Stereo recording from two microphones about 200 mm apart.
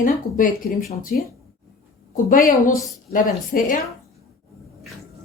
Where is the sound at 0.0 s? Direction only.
40° left (ahead or behind).